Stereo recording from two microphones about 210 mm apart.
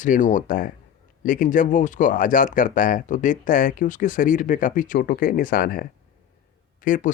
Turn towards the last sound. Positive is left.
turn(degrees=40)  # may be behind; listen again after turning